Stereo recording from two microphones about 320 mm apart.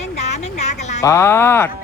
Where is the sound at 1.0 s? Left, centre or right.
Centre.